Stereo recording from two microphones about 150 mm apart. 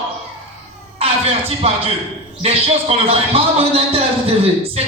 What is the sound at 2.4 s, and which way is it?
Speech, 40° right (ahead or behind).